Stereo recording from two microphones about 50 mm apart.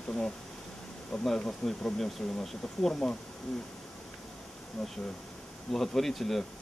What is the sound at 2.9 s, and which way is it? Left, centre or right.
Speech, left.